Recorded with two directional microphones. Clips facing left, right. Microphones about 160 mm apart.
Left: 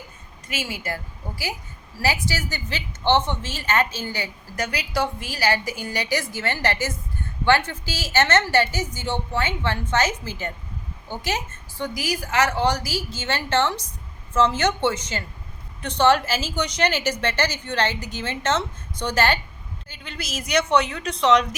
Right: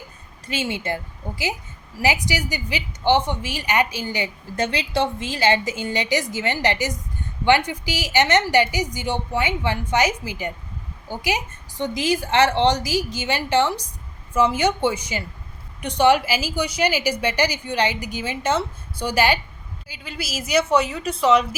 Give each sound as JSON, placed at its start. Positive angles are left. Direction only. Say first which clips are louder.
{"t": 0.4, "sound": "a woman's voice", "louder": "right 5 dB", "side_deg": -25}